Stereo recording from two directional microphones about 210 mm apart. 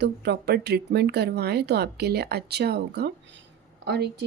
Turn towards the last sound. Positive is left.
turn(degrees=-55)  # may be behind; listen again after turning